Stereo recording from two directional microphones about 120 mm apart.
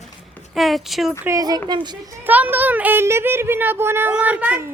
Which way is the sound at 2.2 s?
15° right (ahead or behind).